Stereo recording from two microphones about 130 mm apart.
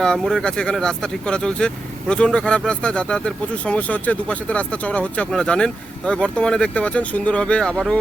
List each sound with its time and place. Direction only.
0.0 s speech: 5° left (ahead or behind)